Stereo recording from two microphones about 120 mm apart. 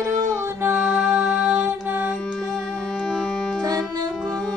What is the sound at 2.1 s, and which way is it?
Music, centre (ahead or behind).